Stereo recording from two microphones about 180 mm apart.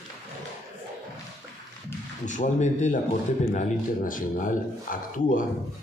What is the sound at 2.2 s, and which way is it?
Speech, 45° left (ahead or behind).